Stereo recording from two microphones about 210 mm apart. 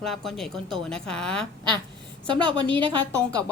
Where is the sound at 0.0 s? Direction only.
Centre (ahead or behind).